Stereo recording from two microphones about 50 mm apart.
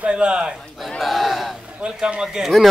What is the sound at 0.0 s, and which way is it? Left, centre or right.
Speech, centre.